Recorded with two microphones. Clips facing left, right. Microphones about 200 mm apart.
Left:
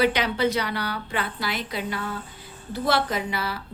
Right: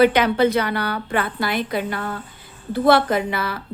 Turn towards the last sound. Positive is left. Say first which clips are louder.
# right 6 dB
turn(degrees=-55)  # may be behind; listen again after turning